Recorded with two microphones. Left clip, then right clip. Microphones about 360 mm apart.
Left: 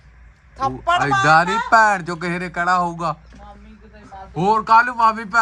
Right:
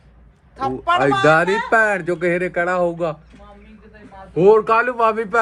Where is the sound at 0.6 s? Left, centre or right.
Left.